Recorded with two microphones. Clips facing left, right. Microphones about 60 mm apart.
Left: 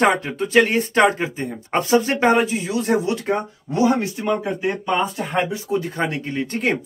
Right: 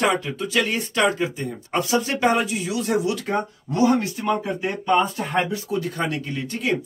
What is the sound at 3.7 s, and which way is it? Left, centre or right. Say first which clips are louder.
Speech: left 1 dB; centre.